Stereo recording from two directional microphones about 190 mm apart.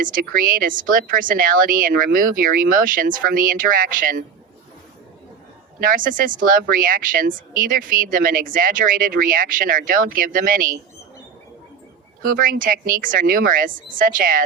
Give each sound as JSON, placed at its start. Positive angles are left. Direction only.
{"t": 0.0, "sound": "speech", "side_deg": -45}
{"t": 5.8, "sound": "speech", "side_deg": -45}
{"t": 12.3, "sound": "speech", "side_deg": -45}